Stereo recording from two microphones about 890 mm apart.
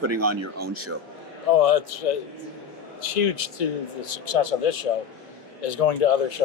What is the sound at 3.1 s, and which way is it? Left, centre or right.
Speech, left.